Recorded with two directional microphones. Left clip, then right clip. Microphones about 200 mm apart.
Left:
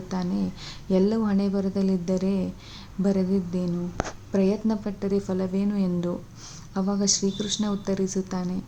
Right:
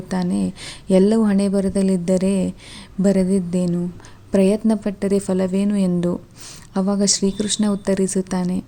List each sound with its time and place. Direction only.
0.1 s speech: 35° right (ahead or behind)